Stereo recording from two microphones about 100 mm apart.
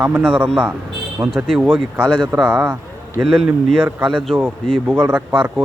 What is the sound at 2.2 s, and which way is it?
A man's voice, centre (ahead or behind).